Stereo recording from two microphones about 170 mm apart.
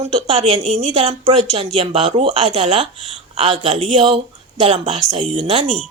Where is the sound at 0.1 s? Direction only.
35° right (ahead or behind).